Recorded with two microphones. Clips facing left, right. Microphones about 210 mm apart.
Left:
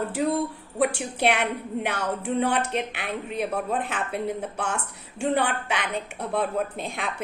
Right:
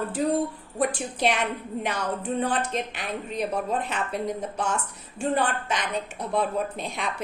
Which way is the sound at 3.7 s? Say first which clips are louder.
Even; 55° left (ahead or behind).